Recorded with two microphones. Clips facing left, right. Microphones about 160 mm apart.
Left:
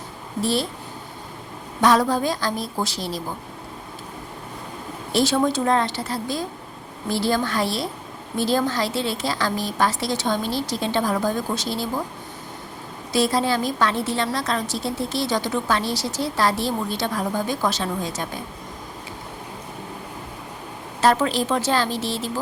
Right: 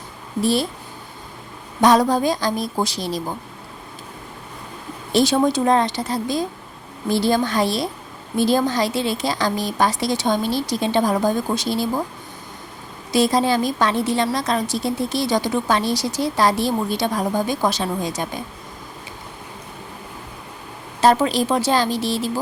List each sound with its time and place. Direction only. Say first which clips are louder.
0.4 s a woman's voice: right 3 dB; 15° right (ahead or behind)
1.8 s a woman's voice: right 3 dB; 15° right (ahead or behind)
5.1 s a woman's voice: right 3 dB; 15° right (ahead or behind)
13.1 s a woman's voice: right 3 dB; 15° right (ahead or behind)
21.0 s a woman's voice: right 3 dB; 15° right (ahead or behind)